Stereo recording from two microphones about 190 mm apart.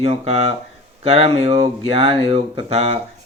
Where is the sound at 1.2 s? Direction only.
35° right (ahead or behind).